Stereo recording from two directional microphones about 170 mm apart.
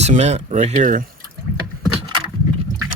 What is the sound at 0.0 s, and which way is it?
Speech, 40° right (ahead or behind).